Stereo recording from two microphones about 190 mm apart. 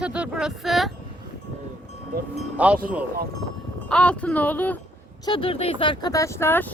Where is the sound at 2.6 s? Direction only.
5° right (ahead or behind).